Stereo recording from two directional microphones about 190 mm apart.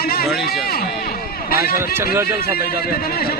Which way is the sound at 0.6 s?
50° left (ahead or behind).